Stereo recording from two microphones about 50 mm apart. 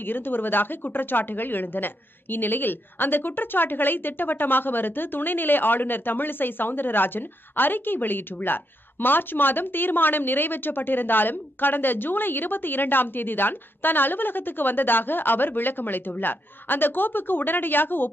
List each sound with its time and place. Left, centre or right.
0.0 s a woman's voice: left